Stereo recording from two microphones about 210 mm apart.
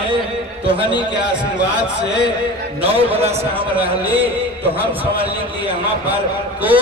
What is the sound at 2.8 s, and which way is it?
Speech, 25° right (ahead or behind).